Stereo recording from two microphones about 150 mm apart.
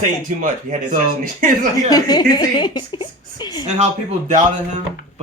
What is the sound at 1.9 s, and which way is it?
A woman's voice, 25° left (ahead or behind).